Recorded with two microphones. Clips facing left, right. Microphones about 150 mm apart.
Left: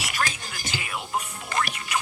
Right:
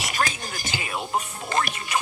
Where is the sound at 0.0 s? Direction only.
25° right (ahead or behind).